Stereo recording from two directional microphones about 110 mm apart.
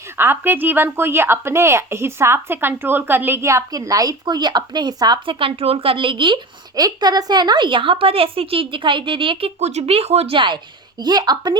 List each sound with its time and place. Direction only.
0.2 s speech: 20° right (ahead or behind); by 5.2 s 40° right (ahead or behind)
5.2 s speech: 55° right (ahead or behind)
9.6 s a woman's voice: 80° right; by 11.5 s 40° right (ahead or behind)